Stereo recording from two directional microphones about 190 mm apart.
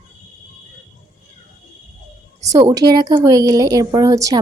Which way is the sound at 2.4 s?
20° right (ahead or behind).